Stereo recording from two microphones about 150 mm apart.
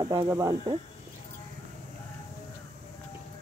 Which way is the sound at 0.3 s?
20° right (ahead or behind).